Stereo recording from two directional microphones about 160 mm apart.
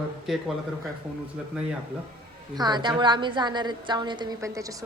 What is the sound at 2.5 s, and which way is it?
A woman's voice, 25° right (ahead or behind).